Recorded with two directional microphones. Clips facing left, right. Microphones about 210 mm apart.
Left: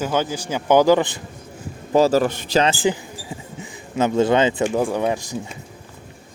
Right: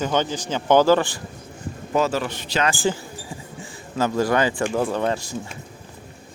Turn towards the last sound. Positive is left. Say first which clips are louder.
# left 2 dB
turn(degrees=15)  # may be behind; listen again after turning